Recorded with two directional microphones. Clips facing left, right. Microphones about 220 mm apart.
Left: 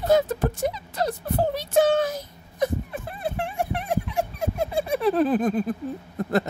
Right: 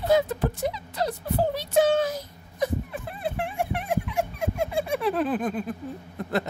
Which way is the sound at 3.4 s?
40° left (ahead or behind).